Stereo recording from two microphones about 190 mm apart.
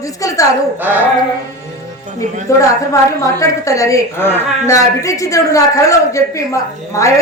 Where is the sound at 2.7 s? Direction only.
15° left (ahead or behind).